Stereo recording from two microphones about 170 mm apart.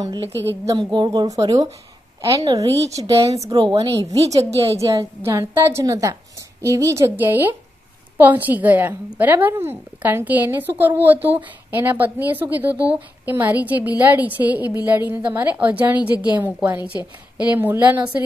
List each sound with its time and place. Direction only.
0.0 s a woman's voice: 25° right (ahead or behind)